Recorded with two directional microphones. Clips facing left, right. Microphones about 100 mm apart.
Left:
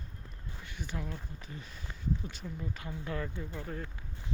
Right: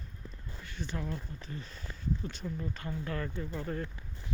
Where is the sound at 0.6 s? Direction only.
15° left (ahead or behind).